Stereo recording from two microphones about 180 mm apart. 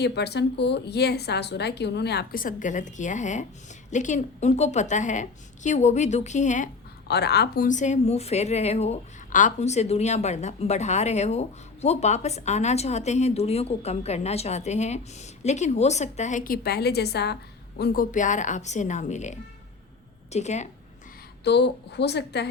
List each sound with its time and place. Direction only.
0.0 s a woman's voice: 65° left (ahead or behind); by 6.7 s 40° left (ahead or behind)
7.1 s a woman's voice: 65° left (ahead or behind); by 20.7 s 40° left (ahead or behind)
21.4 s a woman's voice: 70° left (ahead or behind)